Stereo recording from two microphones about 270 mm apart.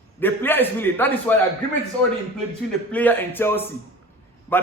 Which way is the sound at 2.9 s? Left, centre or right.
Centre.